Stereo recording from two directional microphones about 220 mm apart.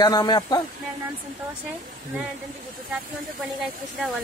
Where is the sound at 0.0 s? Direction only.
20° left (ahead or behind).